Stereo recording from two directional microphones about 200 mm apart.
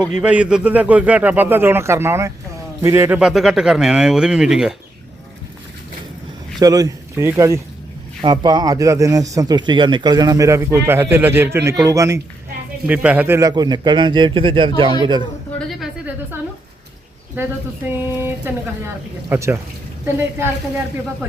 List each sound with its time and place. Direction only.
0.1 s speech: 5° right (ahead or behind)
6.6 s a man's voice: 20° right (ahead or behind)
15.5 s a sound: 5° right (ahead or behind)
17.8 s speech: 10° right (ahead or behind)